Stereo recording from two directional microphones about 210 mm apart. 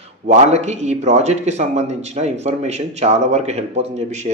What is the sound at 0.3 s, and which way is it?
Speech, 30° right (ahead or behind).